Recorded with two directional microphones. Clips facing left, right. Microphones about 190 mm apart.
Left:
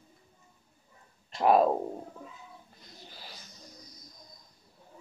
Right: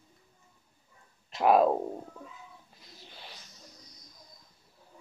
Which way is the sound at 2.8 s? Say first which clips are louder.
Right 1 dB; centre (ahead or behind).